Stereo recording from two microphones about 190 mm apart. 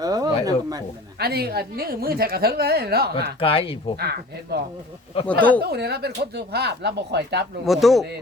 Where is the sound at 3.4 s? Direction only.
30° left (ahead or behind).